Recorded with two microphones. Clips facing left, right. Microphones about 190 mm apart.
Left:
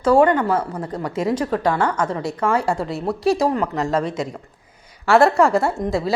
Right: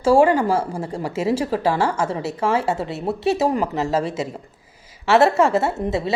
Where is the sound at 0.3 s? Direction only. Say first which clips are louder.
Even; 10° right (ahead or behind).